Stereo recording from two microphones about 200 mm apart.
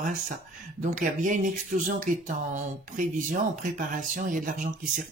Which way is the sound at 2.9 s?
40° right (ahead or behind).